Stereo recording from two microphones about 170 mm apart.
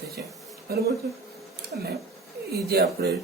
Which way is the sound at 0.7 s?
65° right (ahead or behind).